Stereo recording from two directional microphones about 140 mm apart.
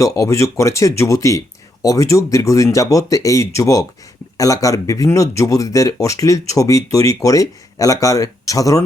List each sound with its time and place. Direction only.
0.0 s speech: 20° left (ahead or behind)